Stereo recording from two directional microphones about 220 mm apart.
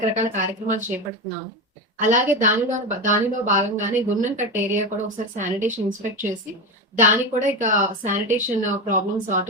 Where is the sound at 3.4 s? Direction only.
35° right (ahead or behind).